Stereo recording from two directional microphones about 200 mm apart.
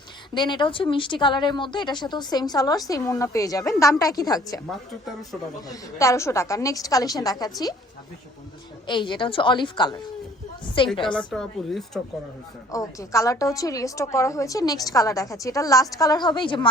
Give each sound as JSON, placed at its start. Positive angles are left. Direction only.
{"t": 0.3, "sound": "speech", "side_deg": 25}
{"t": 5.6, "sound": "a woman's voice", "side_deg": 15}
{"t": 8.9, "sound": "speech", "side_deg": 25}
{"t": 11.3, "sound": "a woman's voice", "side_deg": 0}
{"t": 12.7, "sound": "a woman's voice", "side_deg": 15}